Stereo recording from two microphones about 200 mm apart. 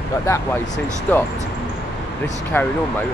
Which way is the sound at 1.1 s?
10° left (ahead or behind).